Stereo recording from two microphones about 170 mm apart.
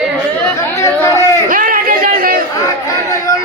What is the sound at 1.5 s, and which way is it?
Chatter, 50° right (ahead or behind).